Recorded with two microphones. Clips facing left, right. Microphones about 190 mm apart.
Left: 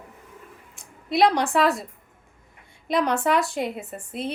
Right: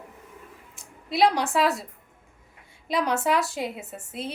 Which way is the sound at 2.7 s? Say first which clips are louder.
Left 3 dB; 55° left (ahead or behind).